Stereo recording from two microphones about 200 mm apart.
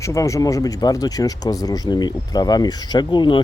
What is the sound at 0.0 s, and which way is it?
A man's voice, 15° left (ahead or behind).